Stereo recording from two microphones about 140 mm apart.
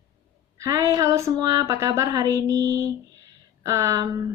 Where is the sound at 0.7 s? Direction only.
25° right (ahead or behind).